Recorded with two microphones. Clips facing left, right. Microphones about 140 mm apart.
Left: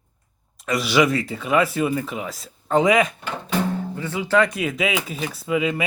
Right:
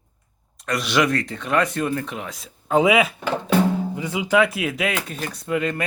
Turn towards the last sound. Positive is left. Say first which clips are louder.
# left 1 dB
turn(degrees=5)  # may be behind; listen again after turning